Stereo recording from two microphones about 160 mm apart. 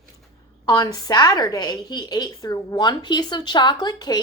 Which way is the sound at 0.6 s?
25° left (ahead or behind).